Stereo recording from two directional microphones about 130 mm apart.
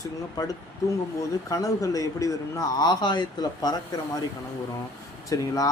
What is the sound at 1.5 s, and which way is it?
A man's voice, 25° left (ahead or behind).